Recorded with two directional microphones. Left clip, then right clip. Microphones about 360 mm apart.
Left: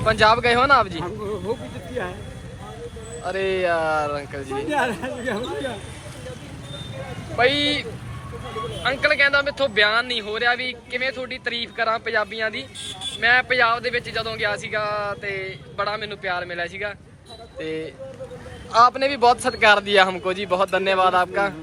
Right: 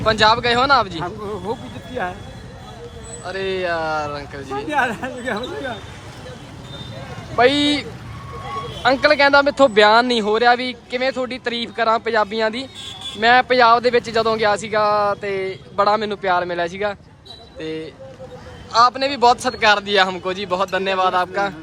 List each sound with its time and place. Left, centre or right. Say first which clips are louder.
0.0 s speech: right 2 dB; centre
3.2 s speech: left 1 dB; centre
7.3 s speech: right 4 dB; centre
8.9 s speech: right 5 dB; centre
12.8 s a sound: even; right
13.1 s speech: right 4 dB; centre